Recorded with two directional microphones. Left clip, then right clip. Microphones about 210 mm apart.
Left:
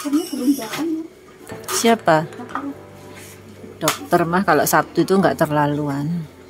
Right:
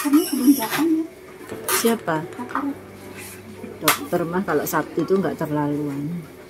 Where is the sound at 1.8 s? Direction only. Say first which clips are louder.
Left 8 dB; 50° left (ahead or behind).